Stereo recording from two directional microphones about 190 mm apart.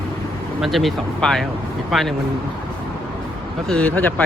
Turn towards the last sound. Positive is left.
turn(degrees=10)  # may be behind; listen again after turning